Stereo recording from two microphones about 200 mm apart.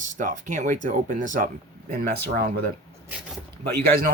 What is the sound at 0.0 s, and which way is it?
Speech, 40° right (ahead or behind).